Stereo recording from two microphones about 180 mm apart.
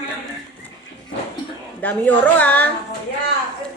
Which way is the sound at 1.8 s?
10° left (ahead or behind).